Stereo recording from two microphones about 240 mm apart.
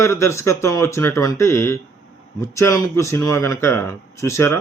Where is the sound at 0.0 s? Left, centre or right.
Centre.